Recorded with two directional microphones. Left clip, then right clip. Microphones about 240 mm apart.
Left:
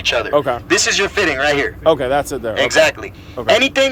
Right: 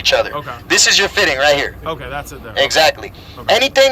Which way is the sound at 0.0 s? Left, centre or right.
Centre.